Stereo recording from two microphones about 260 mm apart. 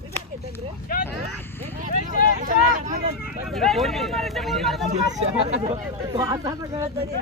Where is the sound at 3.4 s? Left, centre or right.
Centre.